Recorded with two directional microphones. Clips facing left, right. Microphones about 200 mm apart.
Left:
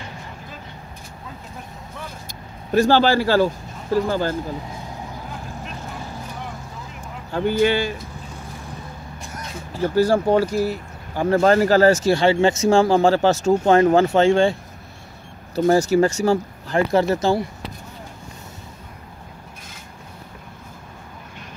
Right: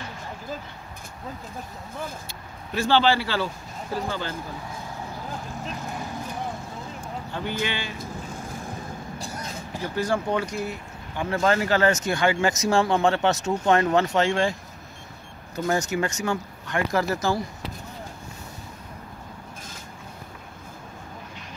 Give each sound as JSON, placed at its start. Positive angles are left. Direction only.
{"t": 2.7, "sound": "speech", "side_deg": 45}
{"t": 7.3, "sound": "speech", "side_deg": 45}
{"t": 9.9, "sound": "speech", "side_deg": 35}